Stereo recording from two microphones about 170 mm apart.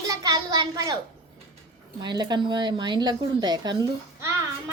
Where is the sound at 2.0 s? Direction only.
25° right (ahead or behind).